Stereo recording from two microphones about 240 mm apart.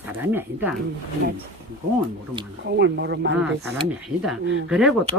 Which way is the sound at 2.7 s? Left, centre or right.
Right.